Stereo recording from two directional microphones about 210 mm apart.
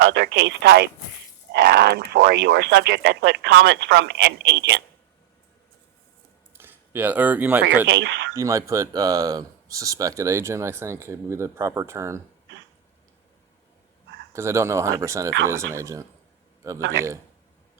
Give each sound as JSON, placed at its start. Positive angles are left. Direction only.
{"t": 0.0, "sound": "speech", "side_deg": -50}
{"t": 6.5, "sound": "a sound", "side_deg": -10}
{"t": 7.9, "sound": "speech", "side_deg": -55}
{"t": 8.4, "sound": "speech", "side_deg": -15}
{"t": 14.3, "sound": "speech", "side_deg": -15}